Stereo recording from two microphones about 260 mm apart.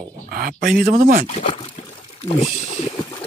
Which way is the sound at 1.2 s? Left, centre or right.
Left.